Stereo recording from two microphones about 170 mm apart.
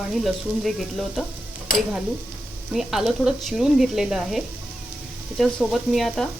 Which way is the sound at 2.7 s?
Centre (ahead or behind).